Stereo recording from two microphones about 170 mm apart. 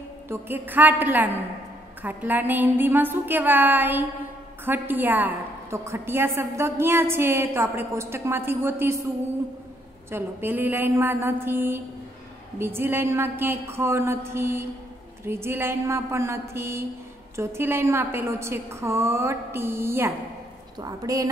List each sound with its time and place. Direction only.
0.3 s a woman's voice: 10° right (ahead or behind)
10.1 s a woman's voice: 10° right (ahead or behind)